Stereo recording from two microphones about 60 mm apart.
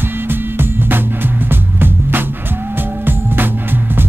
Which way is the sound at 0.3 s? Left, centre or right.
Right.